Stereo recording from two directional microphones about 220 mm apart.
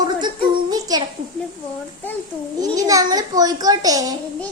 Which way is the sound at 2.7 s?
15° right (ahead or behind).